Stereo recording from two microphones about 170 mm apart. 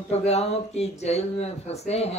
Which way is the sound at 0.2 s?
40° left (ahead or behind).